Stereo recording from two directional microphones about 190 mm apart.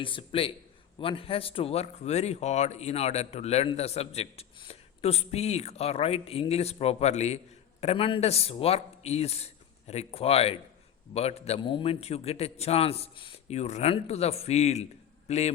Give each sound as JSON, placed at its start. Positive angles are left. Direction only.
{"t": 0.0, "sound": "a man's voice", "side_deg": 25}